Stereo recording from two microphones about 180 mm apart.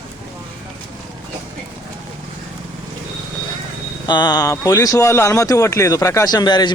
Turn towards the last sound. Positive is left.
turn(degrees=25)  # may be behind; listen again after turning